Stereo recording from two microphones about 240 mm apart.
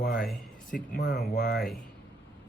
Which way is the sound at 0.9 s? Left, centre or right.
Left.